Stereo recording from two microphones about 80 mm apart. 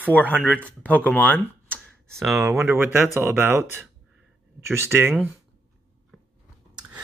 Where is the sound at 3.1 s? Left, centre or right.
Right.